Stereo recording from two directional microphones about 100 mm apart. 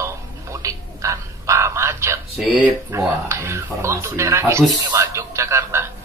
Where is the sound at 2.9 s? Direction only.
25° right (ahead or behind).